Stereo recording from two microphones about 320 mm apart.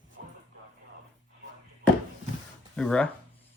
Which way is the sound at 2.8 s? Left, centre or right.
Centre.